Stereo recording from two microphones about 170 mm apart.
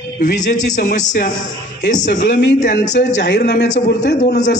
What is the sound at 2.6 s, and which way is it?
Speech, 45° left (ahead or behind).